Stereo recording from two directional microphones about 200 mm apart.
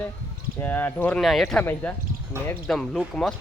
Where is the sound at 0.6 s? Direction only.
10° left (ahead or behind).